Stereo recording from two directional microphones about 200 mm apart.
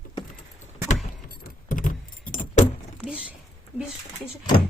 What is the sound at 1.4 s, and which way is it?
Keys jangling, 40° left (ahead or behind).